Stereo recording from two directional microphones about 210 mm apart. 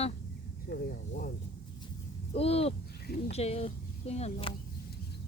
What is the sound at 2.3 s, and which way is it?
Speech, 30° left (ahead or behind).